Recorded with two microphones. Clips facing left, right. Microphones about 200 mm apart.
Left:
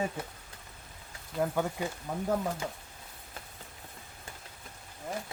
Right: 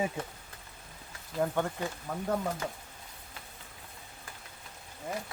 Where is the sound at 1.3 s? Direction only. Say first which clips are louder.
Even; 5° left (ahead or behind).